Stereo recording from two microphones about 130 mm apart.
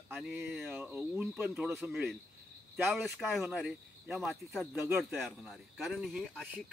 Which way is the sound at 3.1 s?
Centre (ahead or behind).